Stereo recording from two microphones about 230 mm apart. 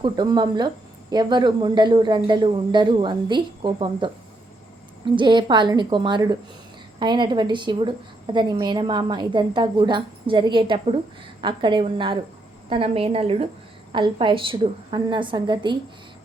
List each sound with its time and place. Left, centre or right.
0.0 s a woman's voice: centre